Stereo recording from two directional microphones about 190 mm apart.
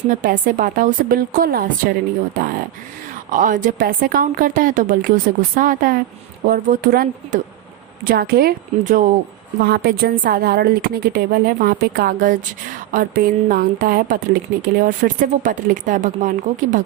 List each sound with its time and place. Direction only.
0.1 s a woman's voice: 45° right (ahead or behind)
9.6 s a woman's voice: 55° right (ahead or behind)